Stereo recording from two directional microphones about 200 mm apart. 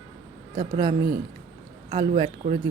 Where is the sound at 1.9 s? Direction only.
25° right (ahead or behind).